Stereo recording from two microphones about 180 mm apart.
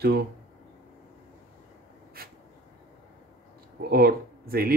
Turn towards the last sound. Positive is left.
turn(degrees=-55)  # may be behind; listen again after turning